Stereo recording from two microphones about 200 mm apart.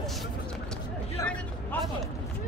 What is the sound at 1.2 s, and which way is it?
Vehicle, 15° left (ahead or behind).